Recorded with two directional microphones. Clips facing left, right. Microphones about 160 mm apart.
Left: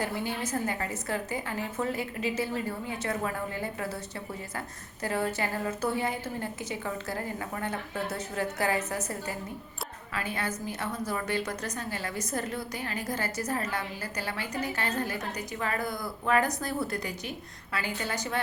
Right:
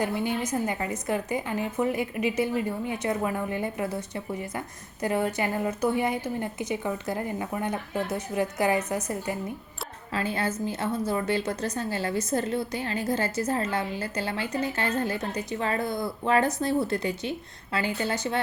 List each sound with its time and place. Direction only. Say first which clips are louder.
0.0 s a woman's voice: right 5 dB; 20° right (ahead or behind)
10.2 s a woman's voice: right 5 dB; 30° right (ahead or behind)